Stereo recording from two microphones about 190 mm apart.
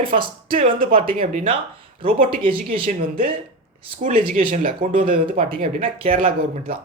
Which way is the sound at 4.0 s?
40° right (ahead or behind).